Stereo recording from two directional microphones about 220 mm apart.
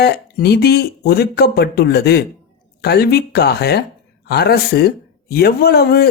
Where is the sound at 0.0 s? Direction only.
45° left (ahead or behind).